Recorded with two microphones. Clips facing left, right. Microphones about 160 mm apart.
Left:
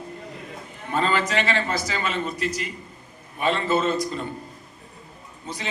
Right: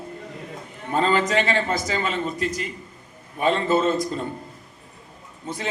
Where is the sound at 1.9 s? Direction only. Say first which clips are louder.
Right 2 dB; 40° right (ahead or behind).